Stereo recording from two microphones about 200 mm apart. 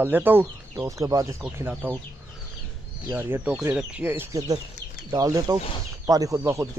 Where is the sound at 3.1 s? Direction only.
10° right (ahead or behind).